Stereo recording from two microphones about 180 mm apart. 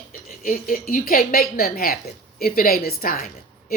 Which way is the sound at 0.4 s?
50° left (ahead or behind).